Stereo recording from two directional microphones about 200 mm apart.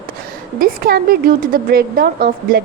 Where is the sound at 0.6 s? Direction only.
50° right (ahead or behind).